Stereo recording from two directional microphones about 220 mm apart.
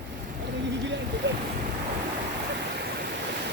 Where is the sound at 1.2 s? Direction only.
55° right (ahead or behind).